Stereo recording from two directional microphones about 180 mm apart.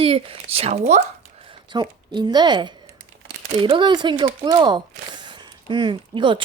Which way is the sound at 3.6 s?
25° right (ahead or behind).